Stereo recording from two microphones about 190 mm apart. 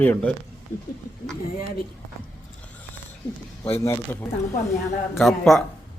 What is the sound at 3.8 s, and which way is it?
Speech, 15° left (ahead or behind).